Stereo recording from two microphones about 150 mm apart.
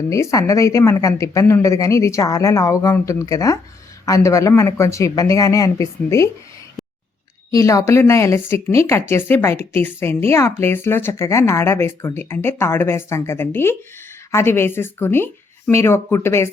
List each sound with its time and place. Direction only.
0.1 s a woman's voice: 20° left (ahead or behind)
7.5 s a woman's voice: 20° left (ahead or behind)